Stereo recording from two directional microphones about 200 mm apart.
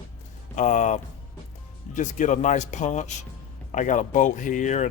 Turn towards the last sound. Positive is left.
turn(degrees=35)  # may be behind; listen again after turning